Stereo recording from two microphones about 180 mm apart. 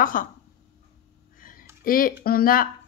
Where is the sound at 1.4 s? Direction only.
50° left (ahead or behind).